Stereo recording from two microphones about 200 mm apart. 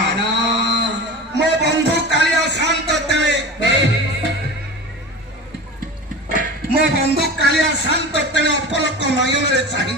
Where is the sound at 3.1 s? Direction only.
60° right (ahead or behind).